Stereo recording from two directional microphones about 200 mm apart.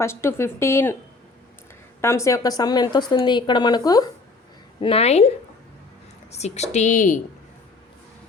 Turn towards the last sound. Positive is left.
turn(degrees=40)  # may be behind; listen again after turning